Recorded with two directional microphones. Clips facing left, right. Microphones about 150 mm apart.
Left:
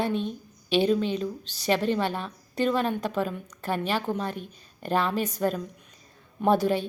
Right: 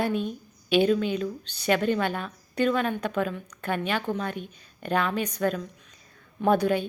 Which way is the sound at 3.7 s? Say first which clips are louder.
Left 1 dB; 35° left (ahead or behind).